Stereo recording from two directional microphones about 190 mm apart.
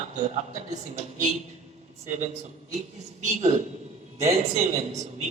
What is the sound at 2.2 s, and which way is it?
A man's voice, 40° right (ahead or behind).